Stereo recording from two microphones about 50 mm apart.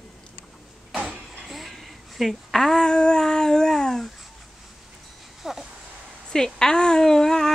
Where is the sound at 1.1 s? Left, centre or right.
Centre.